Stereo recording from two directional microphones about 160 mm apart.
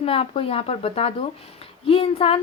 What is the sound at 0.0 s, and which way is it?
Speech, 35° left (ahead or behind).